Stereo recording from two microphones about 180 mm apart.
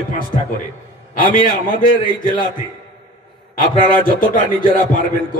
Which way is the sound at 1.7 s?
50° left (ahead or behind).